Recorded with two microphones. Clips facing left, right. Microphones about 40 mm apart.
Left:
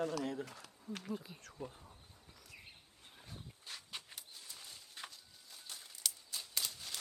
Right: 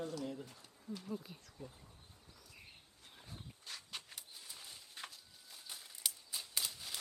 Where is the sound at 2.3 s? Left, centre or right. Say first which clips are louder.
Left 4 dB; left.